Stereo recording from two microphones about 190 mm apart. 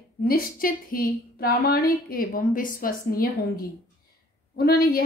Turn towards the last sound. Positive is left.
turn(degrees=55)  # may be behind; listen again after turning